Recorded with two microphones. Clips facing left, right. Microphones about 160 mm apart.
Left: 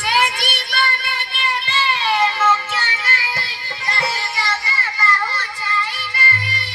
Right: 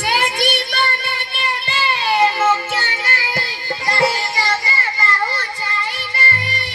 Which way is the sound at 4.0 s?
35° right (ahead or behind).